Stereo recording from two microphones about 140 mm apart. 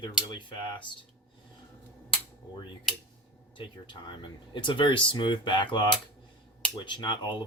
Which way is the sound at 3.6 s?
35° left (ahead or behind).